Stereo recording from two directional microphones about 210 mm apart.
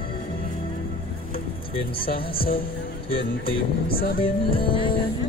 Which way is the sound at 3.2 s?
45° left (ahead or behind).